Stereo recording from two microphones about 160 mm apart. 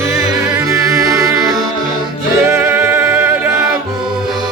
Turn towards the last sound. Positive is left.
turn(degrees=-10)  # may be behind; listen again after turning